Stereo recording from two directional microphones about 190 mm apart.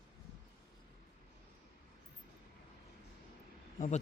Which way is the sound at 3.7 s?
45° left (ahead or behind).